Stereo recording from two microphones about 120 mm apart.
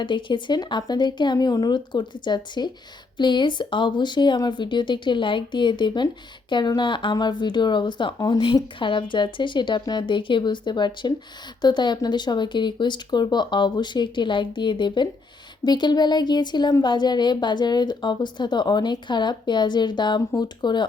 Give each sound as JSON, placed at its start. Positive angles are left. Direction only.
{"t": 0.0, "sound": "speech", "side_deg": 40}